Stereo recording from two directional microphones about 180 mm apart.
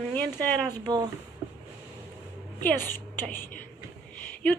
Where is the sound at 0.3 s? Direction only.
10° left (ahead or behind).